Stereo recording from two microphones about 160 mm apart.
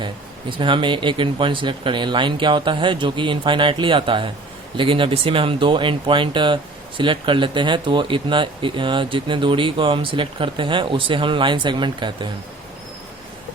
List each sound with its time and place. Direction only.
0.5 s speech: 30° right (ahead or behind)